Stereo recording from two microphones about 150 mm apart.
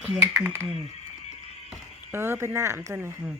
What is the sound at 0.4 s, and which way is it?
Speech, 15° right (ahead or behind).